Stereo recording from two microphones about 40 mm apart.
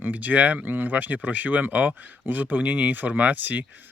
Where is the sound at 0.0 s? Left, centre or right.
Right.